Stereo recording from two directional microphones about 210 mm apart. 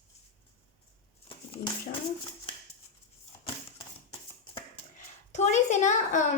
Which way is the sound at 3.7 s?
25° left (ahead or behind).